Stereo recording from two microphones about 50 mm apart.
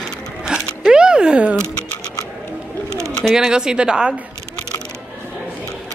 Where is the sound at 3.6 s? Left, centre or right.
Centre.